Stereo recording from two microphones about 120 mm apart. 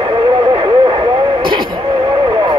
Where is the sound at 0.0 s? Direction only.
40° right (ahead or behind).